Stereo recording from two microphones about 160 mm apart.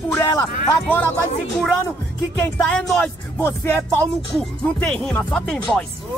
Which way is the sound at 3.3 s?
15° left (ahead or behind).